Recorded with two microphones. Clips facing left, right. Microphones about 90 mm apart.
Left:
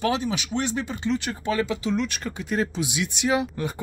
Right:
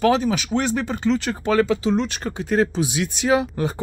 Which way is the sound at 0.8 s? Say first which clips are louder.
Right 5 dB; 45° right (ahead or behind).